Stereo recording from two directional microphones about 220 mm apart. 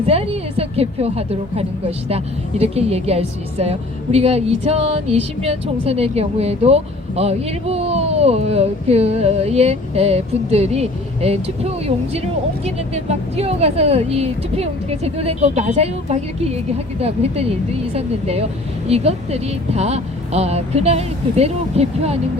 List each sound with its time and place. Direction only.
0.1 s a woman's voice: 25° right (ahead or behind)